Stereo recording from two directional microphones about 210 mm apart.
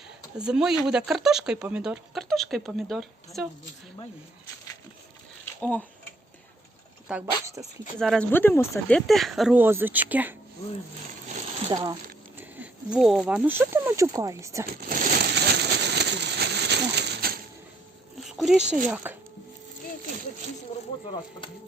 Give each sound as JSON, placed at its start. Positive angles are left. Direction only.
{"t": 0.3, "sound": "speech", "side_deg": -5}
{"t": 5.5, "sound": "speech", "side_deg": 5}
{"t": 7.1, "sound": "speech", "side_deg": -10}
{"t": 7.9, "sound": "speech", "side_deg": 0}
{"t": 9.0, "sound": "speech", "side_deg": 0}
{"t": 11.7, "sound": "speech", "side_deg": -20}
{"t": 12.4, "sound": "speech", "side_deg": -5}
{"t": 14.7, "sound": "a sound", "side_deg": -45}
{"t": 18.3, "sound": "a sound", "side_deg": 0}
{"t": 18.7, "sound": "speech", "side_deg": -5}